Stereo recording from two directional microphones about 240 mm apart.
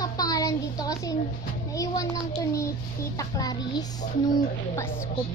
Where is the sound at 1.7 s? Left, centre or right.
Centre.